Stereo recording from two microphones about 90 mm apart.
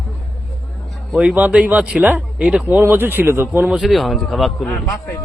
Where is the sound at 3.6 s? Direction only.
5° right (ahead or behind).